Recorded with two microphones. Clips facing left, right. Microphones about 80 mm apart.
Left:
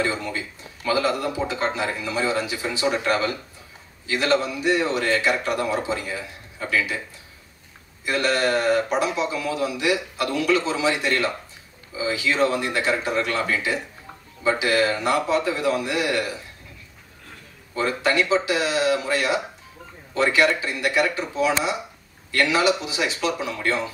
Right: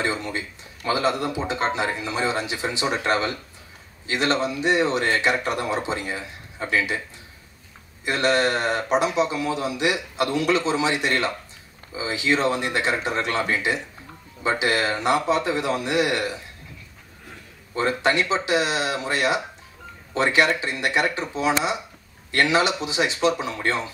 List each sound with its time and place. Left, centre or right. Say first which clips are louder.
0.0 s speech: left 1 dB; right
8.0 s speech: right 1 dB; right
17.7 s speech: even; right